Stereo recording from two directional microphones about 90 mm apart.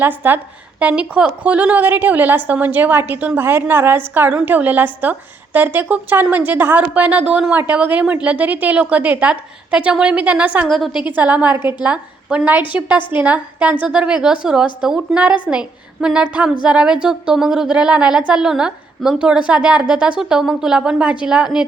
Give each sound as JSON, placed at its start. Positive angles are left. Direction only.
{"t": 0.0, "sound": "a woman's voice", "side_deg": -20}
{"t": 10.7, "sound": "a woman's voice", "side_deg": 0}
{"t": 11.0, "sound": "a woman's voice", "side_deg": -20}